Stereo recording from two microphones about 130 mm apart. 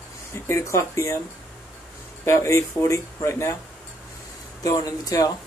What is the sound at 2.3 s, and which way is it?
Speech, 20° left (ahead or behind).